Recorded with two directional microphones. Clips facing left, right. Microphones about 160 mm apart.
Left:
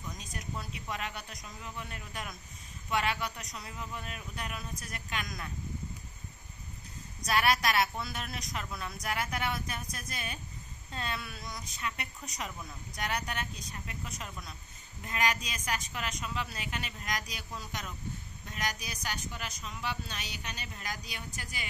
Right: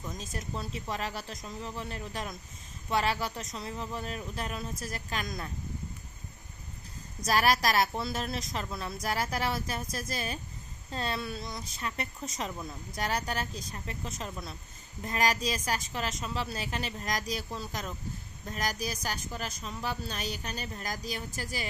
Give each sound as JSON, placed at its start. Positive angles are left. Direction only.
{"t": 0.0, "sound": "speech", "side_deg": -25}
{"t": 7.2, "sound": "speech", "side_deg": -35}